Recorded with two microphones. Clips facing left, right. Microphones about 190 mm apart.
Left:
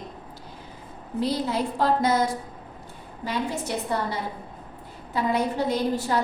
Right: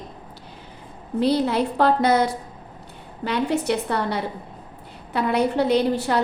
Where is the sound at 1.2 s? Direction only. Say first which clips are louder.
Right 5 dB; 65° right (ahead or behind).